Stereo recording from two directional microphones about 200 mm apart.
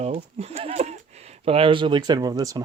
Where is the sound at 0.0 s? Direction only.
30° right (ahead or behind).